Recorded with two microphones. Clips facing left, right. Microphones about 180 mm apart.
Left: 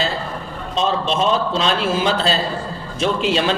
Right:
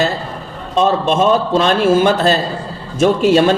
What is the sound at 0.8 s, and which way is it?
Speech, 50° right (ahead or behind).